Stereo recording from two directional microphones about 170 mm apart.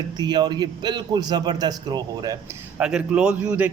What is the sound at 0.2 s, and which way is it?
A man's voice, 25° right (ahead or behind).